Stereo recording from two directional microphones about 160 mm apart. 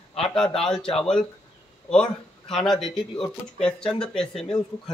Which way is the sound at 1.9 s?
5° left (ahead or behind).